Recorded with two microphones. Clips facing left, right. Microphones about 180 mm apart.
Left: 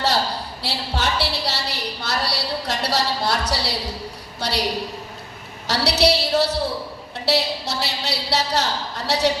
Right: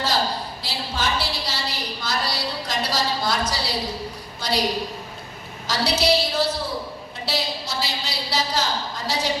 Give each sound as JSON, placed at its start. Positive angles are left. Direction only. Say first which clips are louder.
{"t": 0.6, "sound": "a sound", "louder": "left 3 dB", "side_deg": 70}
{"t": 4.4, "sound": "a woman's voice", "louder": "even", "side_deg": 70}
{"t": 5.6, "sound": "a woman's voice", "louder": "left 2 dB", "side_deg": 70}